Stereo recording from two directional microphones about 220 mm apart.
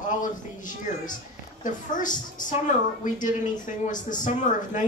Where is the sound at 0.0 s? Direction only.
35° left (ahead or behind).